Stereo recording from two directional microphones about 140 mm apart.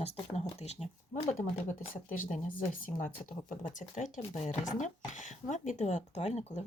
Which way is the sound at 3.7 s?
65° left (ahead or behind).